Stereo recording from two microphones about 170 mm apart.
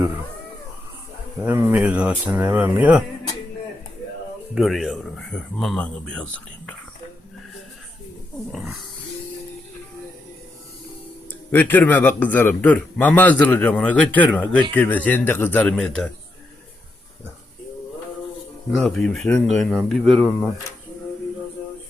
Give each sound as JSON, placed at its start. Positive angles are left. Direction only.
{"t": 1.4, "sound": "speech", "side_deg": -10}
{"t": 4.5, "sound": "speech", "side_deg": 0}
{"t": 11.3, "sound": "a man's voice", "side_deg": 10}
{"t": 18.7, "sound": "speech", "side_deg": 0}